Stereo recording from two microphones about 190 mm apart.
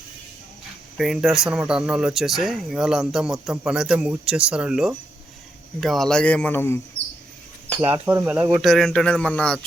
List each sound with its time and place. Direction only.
0.9 s a man's voice: centre (ahead or behind)
7.9 s speech: 15° right (ahead or behind); by 9.6 s 5° left (ahead or behind)